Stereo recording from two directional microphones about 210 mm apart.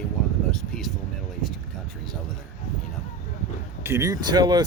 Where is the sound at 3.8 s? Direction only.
15° right (ahead or behind).